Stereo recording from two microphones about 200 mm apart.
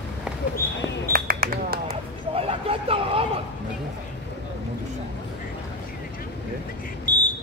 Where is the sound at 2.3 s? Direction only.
30° right (ahead or behind).